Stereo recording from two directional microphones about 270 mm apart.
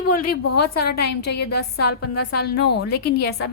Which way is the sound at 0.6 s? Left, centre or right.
Left.